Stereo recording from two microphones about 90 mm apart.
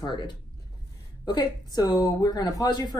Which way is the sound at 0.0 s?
60° left (ahead or behind).